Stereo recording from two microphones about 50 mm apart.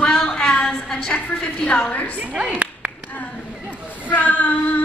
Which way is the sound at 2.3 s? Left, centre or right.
Centre.